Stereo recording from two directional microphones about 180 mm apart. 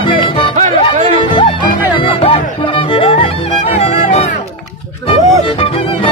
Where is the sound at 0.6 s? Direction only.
40° right (ahead or behind).